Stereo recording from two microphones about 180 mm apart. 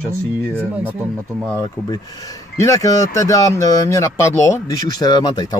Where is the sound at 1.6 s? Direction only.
20° left (ahead or behind).